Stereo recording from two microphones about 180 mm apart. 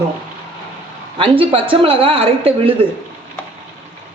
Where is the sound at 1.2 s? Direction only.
30° right (ahead or behind).